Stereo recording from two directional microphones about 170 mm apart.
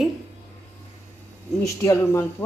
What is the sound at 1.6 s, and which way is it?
Speech, 20° left (ahead or behind).